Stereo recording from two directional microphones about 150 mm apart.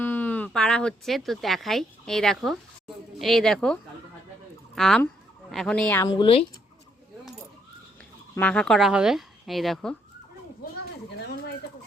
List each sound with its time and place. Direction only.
0.0 s speech: 15° left (ahead or behind)
4.7 s a sound: centre (ahead or behind)
6.0 s speech: 30° left (ahead or behind)
8.4 s speech: 5° left (ahead or behind)
11.2 s fowl: 90° left